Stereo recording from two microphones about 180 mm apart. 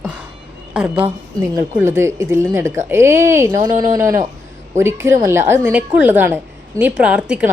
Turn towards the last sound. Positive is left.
turn(degrees=-5)  # may be behind; listen again after turning